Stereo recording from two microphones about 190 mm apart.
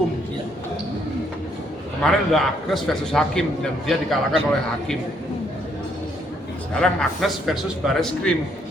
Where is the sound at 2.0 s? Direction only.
Centre (ahead or behind).